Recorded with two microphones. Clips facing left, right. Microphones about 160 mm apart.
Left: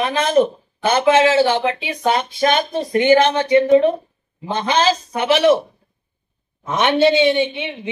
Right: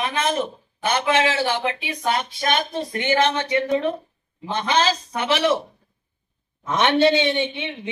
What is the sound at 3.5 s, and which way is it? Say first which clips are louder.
Speech: left 9 dB; 25° left (ahead or behind).